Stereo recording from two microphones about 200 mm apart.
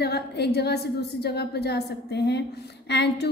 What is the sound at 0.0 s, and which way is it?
A woman's voice, 55° left (ahead or behind).